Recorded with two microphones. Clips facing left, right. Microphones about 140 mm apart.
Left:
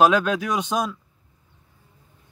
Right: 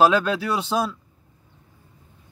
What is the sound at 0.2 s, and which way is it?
Speech, 10° left (ahead or behind).